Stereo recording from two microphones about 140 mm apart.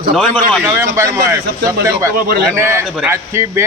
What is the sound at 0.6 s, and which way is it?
Speech, 15° right (ahead or behind).